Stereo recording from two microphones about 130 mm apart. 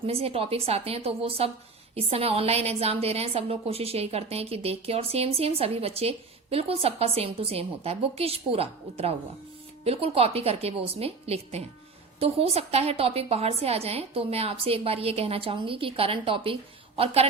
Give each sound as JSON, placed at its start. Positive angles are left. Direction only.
{"t": 0.0, "sound": "a woman's voice", "side_deg": -50}